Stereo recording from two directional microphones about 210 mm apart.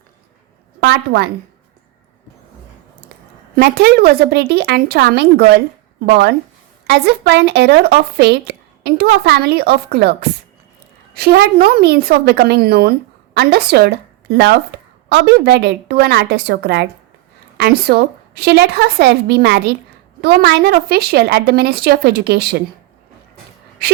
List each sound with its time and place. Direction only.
0.8 s speech: 50° right (ahead or behind)
3.5 s speech: 50° right (ahead or behind)
6.8 s a woman's voice: 50° right (ahead or behind)
23.8 s speech: 50° right (ahead or behind)